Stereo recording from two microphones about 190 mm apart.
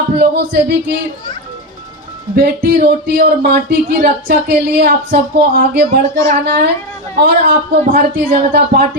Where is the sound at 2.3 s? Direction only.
50° right (ahead or behind).